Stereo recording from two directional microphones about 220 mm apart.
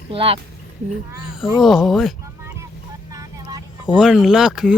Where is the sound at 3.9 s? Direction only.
5° right (ahead or behind).